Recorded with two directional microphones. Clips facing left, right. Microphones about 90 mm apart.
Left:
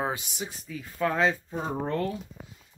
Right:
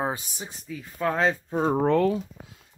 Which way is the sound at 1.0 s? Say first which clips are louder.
Right 1 dB; 15° right (ahead or behind).